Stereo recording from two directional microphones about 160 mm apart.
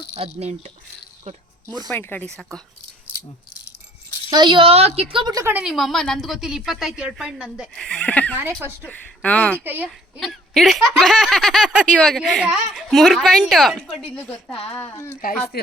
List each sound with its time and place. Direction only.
0.3 s speech: 40° right (ahead or behind)
1.9 s speech: 15° left (ahead or behind)
4.3 s a woman's voice: 30° right (ahead or behind)
5.6 s a woman's voice: centre (ahead or behind)
9.6 s speech: 10° right (ahead or behind)
10.2 s a woman's voice: centre (ahead or behind)
15.5 s speech: 75° left (ahead or behind)